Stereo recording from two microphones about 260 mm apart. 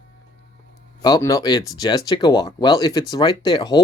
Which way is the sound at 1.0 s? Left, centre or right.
Centre.